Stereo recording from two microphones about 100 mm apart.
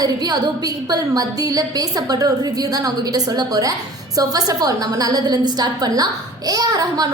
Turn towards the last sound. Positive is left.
turn(degrees=-40)  # may be behind; listen again after turning